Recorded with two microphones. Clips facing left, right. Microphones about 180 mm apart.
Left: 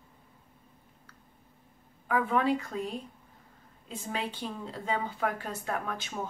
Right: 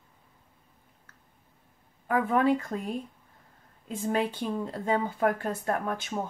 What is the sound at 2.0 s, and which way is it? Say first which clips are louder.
Speech: right 3 dB; 50° right (ahead or behind).